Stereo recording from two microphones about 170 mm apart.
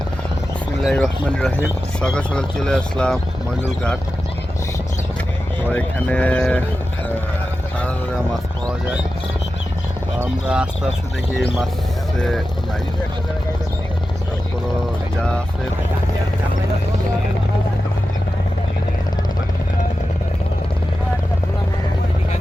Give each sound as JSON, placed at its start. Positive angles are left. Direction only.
{"t": 0.8, "sound": "speech", "side_deg": 0}
{"t": 5.6, "sound": "speech", "side_deg": 10}
{"t": 7.8, "sound": "speech", "side_deg": 5}
{"t": 10.2, "sound": "speech", "side_deg": -5}
{"t": 12.1, "sound": "speech", "side_deg": 0}